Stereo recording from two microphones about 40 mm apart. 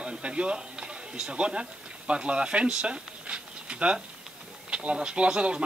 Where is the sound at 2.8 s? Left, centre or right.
Right.